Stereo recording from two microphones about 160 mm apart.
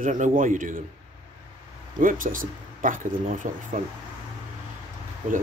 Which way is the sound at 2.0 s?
60° right (ahead or behind).